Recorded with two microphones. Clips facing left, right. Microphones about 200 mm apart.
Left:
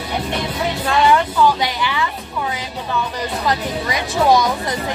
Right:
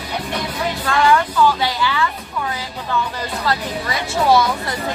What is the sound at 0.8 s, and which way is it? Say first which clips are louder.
A woman's voice: left 1 dB; 20° left (ahead or behind).